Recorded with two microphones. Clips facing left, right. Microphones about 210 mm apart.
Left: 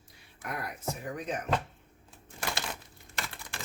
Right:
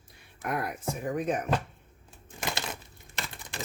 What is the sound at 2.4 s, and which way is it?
Crumpling, 20° right (ahead or behind).